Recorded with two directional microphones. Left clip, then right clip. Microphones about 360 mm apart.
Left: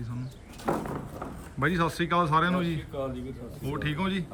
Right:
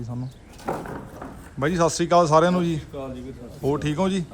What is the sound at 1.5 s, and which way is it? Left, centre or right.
Speech, centre.